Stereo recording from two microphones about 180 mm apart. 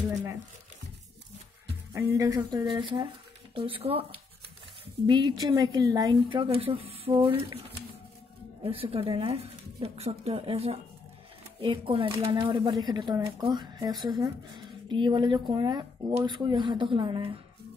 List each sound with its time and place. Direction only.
2.0 s a woman's voice: 15° right (ahead or behind)
5.0 s a woman's voice: 25° right (ahead or behind)
8.6 s a woman's voice: 30° right (ahead or behind)